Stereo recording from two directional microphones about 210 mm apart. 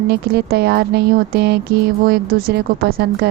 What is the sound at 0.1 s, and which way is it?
A woman's voice, 50° right (ahead or behind).